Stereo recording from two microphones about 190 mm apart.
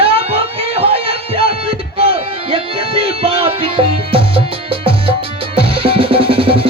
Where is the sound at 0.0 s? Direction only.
30° right (ahead or behind).